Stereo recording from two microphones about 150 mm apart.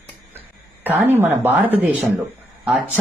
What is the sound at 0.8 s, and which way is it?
Speech, 10° right (ahead or behind).